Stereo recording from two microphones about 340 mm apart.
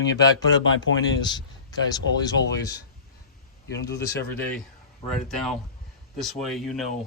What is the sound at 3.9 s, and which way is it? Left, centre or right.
Speech, left.